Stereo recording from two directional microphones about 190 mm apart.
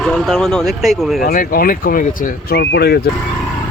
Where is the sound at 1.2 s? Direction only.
50° left (ahead or behind).